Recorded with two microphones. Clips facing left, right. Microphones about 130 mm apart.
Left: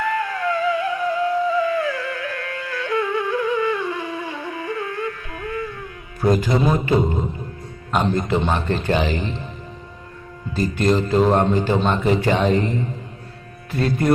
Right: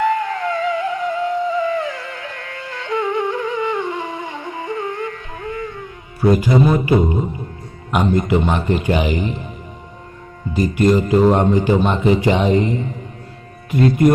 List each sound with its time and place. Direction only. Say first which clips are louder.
0.0 s music: right 4 dB; 20° right (ahead or behind)
6.3 s speech: right 5 dB; 10° right (ahead or behind)
10.5 s speech: right 4 dB; 15° right (ahead or behind)